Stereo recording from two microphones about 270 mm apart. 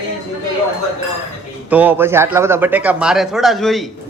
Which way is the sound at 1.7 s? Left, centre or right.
Centre.